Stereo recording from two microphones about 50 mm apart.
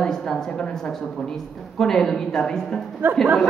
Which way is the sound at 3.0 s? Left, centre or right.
Right.